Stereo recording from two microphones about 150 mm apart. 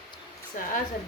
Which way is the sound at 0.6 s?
60° left (ahead or behind).